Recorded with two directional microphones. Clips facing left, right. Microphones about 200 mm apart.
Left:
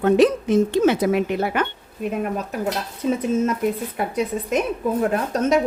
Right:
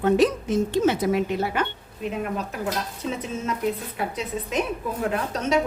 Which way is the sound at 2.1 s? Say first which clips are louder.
Left 4 dB; 45° left (ahead or behind).